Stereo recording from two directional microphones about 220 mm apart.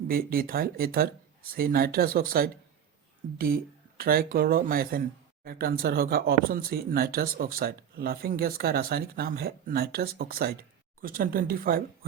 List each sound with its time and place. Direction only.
0.1 s speech: 40° right (ahead or behind)